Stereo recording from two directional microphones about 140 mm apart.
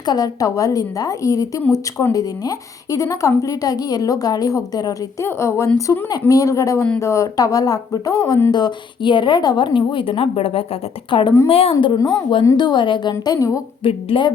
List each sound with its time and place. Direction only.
0.0 s speech: 30° left (ahead or behind)
8.5 s a woman's voice: 30° left (ahead or behind)
11.9 s a woman's voice: 25° left (ahead or behind)
13.8 s a woman's voice: 35° left (ahead or behind)